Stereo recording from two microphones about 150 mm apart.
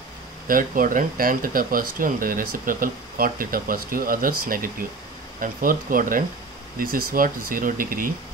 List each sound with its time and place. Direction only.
0.5 s speech: 65° right (ahead or behind)